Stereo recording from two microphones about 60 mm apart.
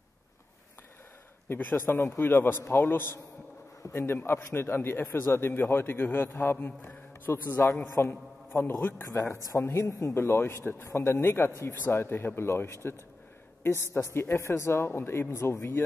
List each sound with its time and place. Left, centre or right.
1.5 s a man's voice: left
9.1 s a man's voice: left
10.8 s a man's voice: left
13.6 s a sound: left
13.9 s speech: left